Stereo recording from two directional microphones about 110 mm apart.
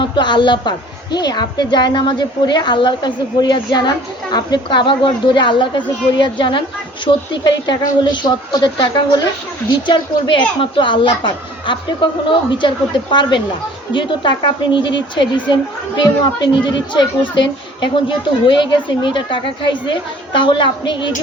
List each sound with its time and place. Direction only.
0.0 s a woman's voice: 45° left (ahead or behind)